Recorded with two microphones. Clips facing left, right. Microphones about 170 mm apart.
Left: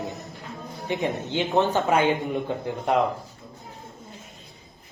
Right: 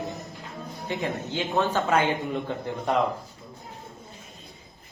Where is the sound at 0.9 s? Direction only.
20° left (ahead or behind).